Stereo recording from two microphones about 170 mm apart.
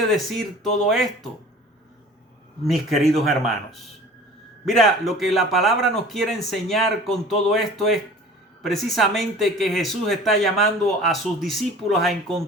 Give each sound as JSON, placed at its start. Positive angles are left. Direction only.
{"t": 0.1, "sound": "speech", "side_deg": 0}
{"t": 2.6, "sound": "speech", "side_deg": 0}